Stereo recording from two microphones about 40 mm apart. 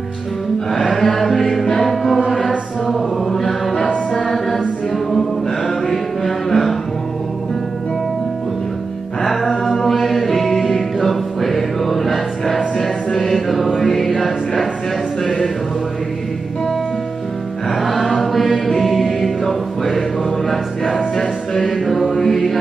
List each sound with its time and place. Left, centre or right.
0.7 s music: centre
2.9 s chant: centre
5.9 s music: centre
9.2 s music: centre
12.8 s choir: centre
17.7 s music: centre
18.2 s choir: centre
20.4 s music: centre
21.2 s music: centre
21.8 s mantra: centre